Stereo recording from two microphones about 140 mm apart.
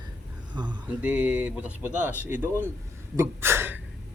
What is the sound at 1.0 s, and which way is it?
Speech, 10° right (ahead or behind).